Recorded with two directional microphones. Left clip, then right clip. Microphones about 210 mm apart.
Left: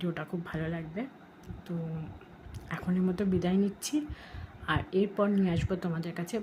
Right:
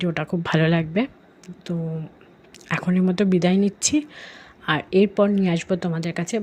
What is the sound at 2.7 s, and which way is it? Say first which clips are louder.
Speech: right 10 dB; 35° right (ahead or behind).